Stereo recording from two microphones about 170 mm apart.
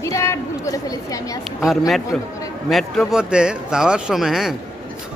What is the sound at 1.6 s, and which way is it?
Speech, centre (ahead or behind).